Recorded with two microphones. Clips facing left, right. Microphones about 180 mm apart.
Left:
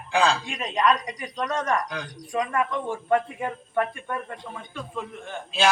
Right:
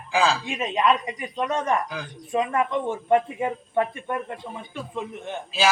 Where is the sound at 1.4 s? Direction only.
15° right (ahead or behind).